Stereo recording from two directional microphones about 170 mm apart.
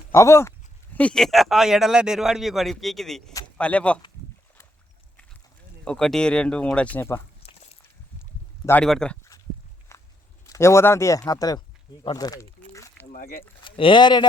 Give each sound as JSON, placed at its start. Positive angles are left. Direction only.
{"t": 0.1, "sound": "speech", "side_deg": 15}
{"t": 0.9, "sound": "a man's voice", "side_deg": 5}
{"t": 5.8, "sound": "a man's voice", "side_deg": 5}
{"t": 7.4, "sound": "a sound", "side_deg": 40}
{"t": 8.6, "sound": "a man's voice", "side_deg": 5}
{"t": 9.9, "sound": "walk", "side_deg": 20}
{"t": 10.4, "sound": "speech", "side_deg": 20}
{"t": 13.1, "sound": "boat", "side_deg": 45}
{"t": 13.7, "sound": "speech", "side_deg": 30}